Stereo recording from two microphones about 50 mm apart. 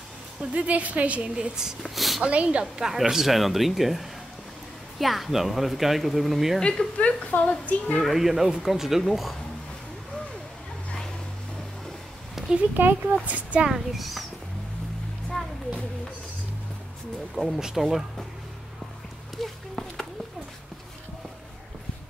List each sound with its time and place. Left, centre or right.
0.4 s a woman's voice: right
2.0 s a sound: centre
2.2 s a woman's voice: right
2.6 s speech: centre
6.6 s a woman's voice: centre
7.1 s a woman's voice: left
8.0 s speech: centre
12.4 s a sound: centre
12.7 s speech: right
13.1 s a woman's voice: right
13.7 s speech: centre
17.6 s speech: centre
19.3 s a sound: centre